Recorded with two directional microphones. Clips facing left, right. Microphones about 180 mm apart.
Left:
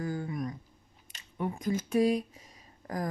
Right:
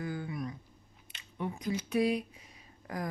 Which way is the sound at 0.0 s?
40° left (ahead or behind).